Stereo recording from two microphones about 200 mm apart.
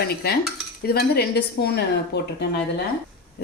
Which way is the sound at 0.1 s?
50° left (ahead or behind).